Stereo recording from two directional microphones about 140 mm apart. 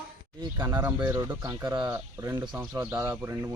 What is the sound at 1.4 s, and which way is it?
Speech, 25° right (ahead or behind).